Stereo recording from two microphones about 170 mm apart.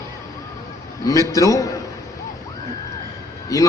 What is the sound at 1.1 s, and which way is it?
Speech, 20° left (ahead or behind).